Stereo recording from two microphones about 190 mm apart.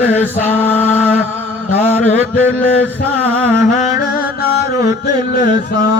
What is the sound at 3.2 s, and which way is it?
Music, 10° right (ahead or behind).